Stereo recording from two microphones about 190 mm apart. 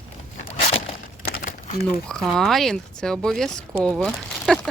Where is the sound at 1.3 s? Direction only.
45° left (ahead or behind).